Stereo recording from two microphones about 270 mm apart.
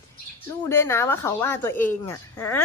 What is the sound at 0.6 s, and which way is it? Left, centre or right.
Speech, centre.